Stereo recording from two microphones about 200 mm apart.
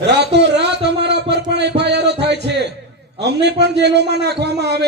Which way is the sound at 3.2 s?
55° right (ahead or behind).